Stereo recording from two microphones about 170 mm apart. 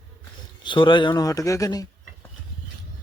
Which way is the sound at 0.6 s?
30° left (ahead or behind).